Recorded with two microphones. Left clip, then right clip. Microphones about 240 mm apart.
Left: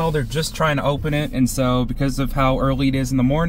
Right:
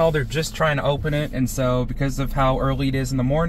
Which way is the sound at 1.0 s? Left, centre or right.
Left.